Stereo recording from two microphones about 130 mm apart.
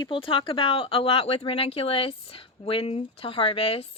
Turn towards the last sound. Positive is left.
turn(degrees=50)  # may be behind; listen again after turning